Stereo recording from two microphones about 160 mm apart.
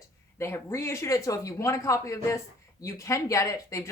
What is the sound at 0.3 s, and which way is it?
Speech, 15° left (ahead or behind).